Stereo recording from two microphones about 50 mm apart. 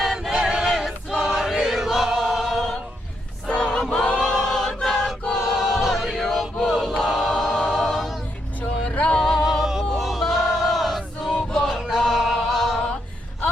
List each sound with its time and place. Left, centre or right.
0.0 s choir: centre
0.4 s a sound: centre
1.2 s crowd: centre
1.8 s choir: centre
3.4 s choir: centre
4.3 s choir: centre
9.1 s music: centre
9.4 s choir: centre
11.3 s music: centre